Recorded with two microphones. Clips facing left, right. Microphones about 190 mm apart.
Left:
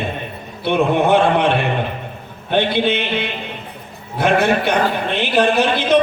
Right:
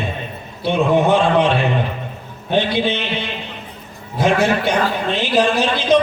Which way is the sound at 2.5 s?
60° left (ahead or behind).